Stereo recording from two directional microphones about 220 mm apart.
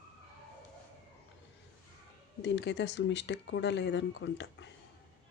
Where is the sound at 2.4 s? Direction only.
55° left (ahead or behind).